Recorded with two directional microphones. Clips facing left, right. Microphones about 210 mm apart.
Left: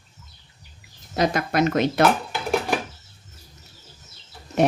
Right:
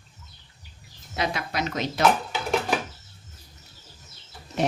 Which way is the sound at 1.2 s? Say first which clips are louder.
Left 7 dB; 50° left (ahead or behind).